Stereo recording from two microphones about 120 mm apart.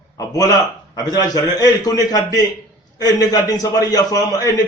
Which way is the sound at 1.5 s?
30° left (ahead or behind).